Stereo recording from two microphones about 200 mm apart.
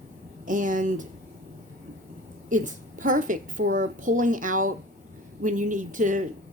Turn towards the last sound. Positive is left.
turn(degrees=-40)  # may be behind; listen again after turning